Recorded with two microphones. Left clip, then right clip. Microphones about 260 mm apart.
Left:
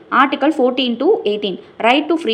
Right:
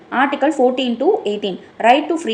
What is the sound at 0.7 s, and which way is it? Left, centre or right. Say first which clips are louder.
A woman's voice: left 1 dB; left.